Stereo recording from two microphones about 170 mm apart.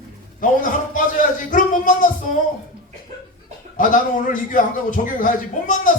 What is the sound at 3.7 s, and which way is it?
A man's voice, 50° left (ahead or behind).